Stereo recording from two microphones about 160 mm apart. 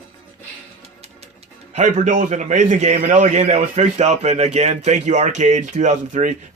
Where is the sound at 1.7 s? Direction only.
50° right (ahead or behind).